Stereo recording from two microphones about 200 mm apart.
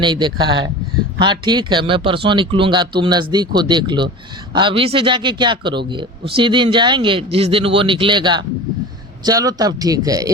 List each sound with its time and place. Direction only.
0.0 s a man's voice: 25° right (ahead or behind)